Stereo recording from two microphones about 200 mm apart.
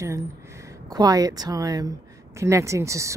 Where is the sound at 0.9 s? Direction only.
20° right (ahead or behind).